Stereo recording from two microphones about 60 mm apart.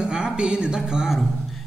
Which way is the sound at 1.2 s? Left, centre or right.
Centre.